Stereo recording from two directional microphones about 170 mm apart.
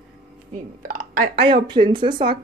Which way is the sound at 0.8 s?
50° right (ahead or behind).